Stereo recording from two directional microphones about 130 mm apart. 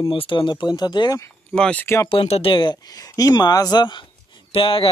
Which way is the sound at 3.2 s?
30° left (ahead or behind).